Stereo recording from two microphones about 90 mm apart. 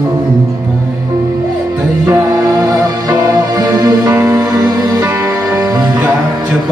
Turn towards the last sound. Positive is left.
turn(degrees=-35)  # may be behind; listen again after turning